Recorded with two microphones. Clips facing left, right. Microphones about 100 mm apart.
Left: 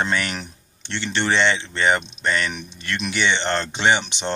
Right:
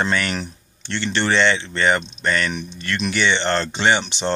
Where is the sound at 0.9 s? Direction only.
20° left (ahead or behind).